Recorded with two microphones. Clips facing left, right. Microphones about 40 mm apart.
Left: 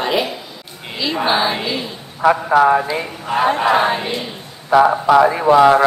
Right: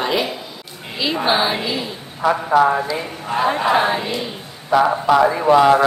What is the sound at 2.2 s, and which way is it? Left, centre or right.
Speech, centre.